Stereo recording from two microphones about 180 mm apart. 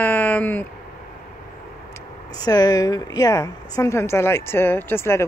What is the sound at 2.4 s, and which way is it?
A woman's voice, 20° left (ahead or behind).